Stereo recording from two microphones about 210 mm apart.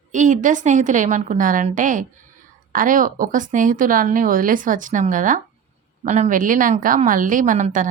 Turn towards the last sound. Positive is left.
turn(degrees=-35)  # may be behind; listen again after turning